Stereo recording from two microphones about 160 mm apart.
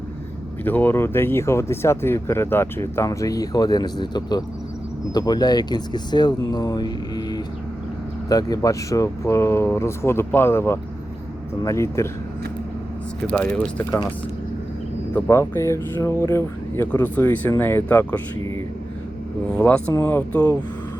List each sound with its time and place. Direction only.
0.6 s speech: 10° left (ahead or behind)
15.1 s speech: 15° left (ahead or behind)
19.5 s speech: 10° left (ahead or behind)